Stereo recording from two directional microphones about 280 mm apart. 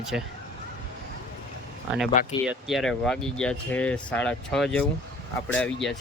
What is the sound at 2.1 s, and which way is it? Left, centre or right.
Speech, left.